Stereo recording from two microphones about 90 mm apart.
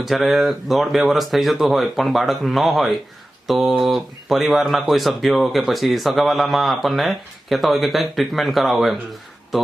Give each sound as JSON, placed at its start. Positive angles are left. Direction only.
{"t": 0.0, "sound": "speech", "side_deg": 0}